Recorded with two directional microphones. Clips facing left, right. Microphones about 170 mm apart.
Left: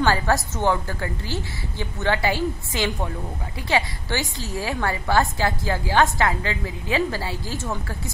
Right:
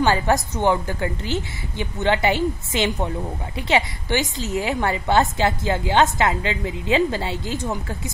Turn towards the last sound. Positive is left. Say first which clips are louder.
# right 3 dB
turn(degrees=-20)  # may be behind; listen again after turning